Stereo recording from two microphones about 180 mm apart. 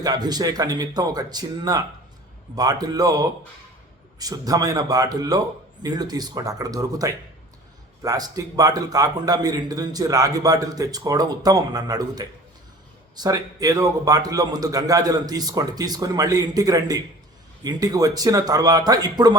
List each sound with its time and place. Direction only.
0.0 s a man's voice: 20° right (ahead or behind)